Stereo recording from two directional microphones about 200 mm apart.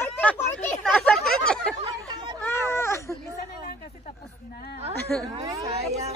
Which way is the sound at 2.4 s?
10° left (ahead or behind).